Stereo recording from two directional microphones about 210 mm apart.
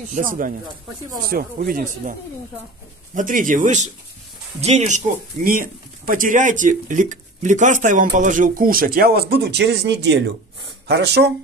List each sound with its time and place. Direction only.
0.1 s speech: 40° right (ahead or behind)
3.2 s speech: 40° right (ahead or behind)